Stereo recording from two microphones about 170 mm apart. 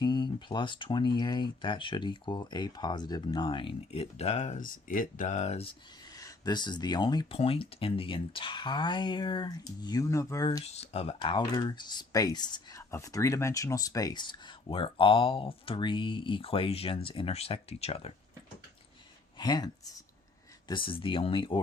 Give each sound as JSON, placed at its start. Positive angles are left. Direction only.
{"t": 0.0, "sound": "speech", "side_deg": 25}
{"t": 6.1, "sound": "speech", "side_deg": 20}
{"t": 10.6, "sound": "speech", "side_deg": 35}
{"t": 19.4, "sound": "speech", "side_deg": 25}